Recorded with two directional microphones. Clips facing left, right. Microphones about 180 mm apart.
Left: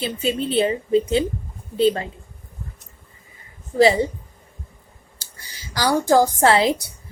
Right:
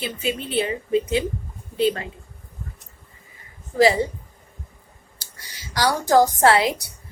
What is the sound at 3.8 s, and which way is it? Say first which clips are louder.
Speech: left 2 dB; 25° left (ahead or behind).